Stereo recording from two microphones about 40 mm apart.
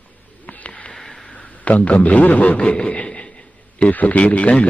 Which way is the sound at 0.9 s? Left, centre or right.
Centre.